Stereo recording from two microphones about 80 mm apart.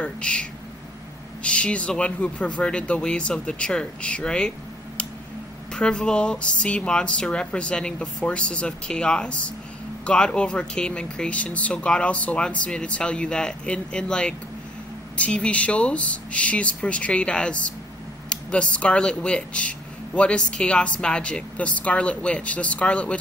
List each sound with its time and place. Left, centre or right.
0.0 s speech: centre
5.7 s speech: centre